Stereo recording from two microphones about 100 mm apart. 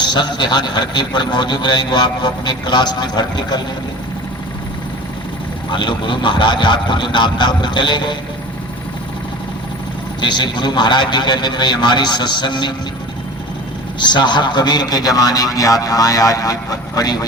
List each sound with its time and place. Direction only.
0.0 s a man's voice: 50° left (ahead or behind)
5.7 s a man's voice: 55° left (ahead or behind)
10.2 s a man's voice: 50° left (ahead or behind)
14.0 s a man's voice: 50° left (ahead or behind)